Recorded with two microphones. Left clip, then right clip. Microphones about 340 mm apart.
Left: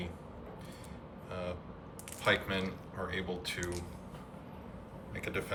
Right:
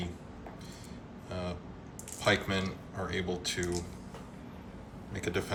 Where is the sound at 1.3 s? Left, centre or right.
Centre.